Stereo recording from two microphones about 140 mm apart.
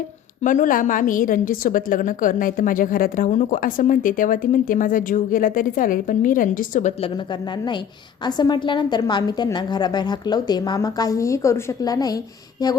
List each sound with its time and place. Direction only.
0.4 s a woman's voice: 65° left (ahead or behind)
8.2 s a woman's voice: 30° left (ahead or behind)